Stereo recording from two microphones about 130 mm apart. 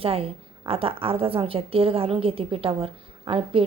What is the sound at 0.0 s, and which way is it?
A woman's voice, 45° right (ahead or behind).